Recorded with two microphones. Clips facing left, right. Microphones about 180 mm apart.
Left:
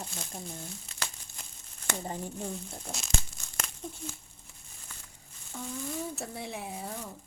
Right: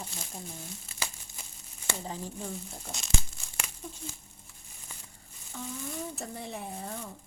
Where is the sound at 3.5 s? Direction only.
10° right (ahead or behind).